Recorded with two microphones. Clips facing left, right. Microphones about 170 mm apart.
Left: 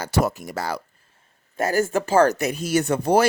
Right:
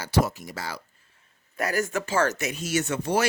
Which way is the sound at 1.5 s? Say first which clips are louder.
Left 5 dB; 30° left (ahead or behind).